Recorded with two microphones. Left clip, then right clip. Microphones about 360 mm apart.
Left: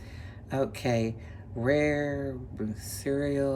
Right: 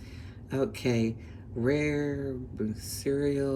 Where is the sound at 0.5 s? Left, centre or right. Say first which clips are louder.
Left 1 dB; centre.